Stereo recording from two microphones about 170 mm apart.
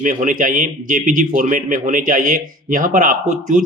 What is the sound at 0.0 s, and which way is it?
Speech, 50° right (ahead or behind).